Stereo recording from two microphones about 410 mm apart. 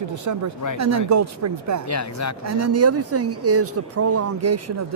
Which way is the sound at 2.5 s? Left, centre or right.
Right.